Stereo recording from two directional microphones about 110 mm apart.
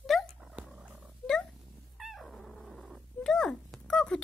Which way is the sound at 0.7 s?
5° right (ahead or behind).